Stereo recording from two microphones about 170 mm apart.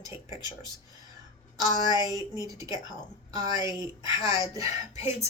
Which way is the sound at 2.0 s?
20° right (ahead or behind).